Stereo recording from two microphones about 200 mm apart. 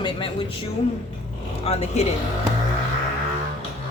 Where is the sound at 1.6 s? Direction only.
35° left (ahead or behind).